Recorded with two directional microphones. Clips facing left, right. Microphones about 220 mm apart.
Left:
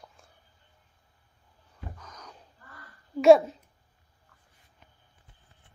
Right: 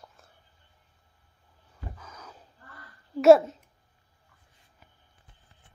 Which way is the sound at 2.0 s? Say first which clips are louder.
Right 1 dB; 5° right (ahead or behind).